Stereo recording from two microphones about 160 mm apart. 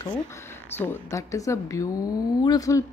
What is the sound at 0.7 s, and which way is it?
A woman's voice, 15° left (ahead or behind).